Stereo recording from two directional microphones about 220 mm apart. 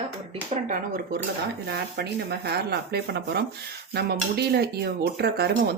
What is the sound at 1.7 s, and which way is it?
Speech, 45° right (ahead or behind).